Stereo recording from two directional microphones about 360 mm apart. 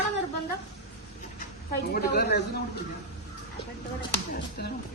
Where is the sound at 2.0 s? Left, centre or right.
Left.